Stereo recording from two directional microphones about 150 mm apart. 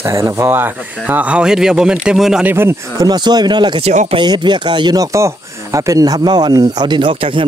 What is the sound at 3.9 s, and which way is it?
Speech, 50° right (ahead or behind).